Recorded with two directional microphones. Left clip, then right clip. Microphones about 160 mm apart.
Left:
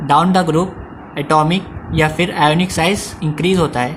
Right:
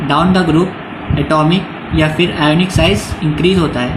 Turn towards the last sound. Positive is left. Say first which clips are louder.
# right 2 dB
turn(degrees=55)  # may be behind; listen again after turning